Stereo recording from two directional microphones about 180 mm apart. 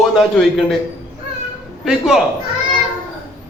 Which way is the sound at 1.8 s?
5° right (ahead or behind).